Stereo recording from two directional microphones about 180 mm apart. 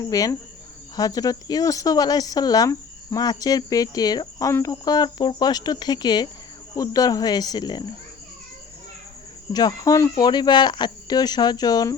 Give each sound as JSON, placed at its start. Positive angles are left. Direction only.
{"t": 0.1, "sound": "speech", "side_deg": 20}
{"t": 9.5, "sound": "speech", "side_deg": 20}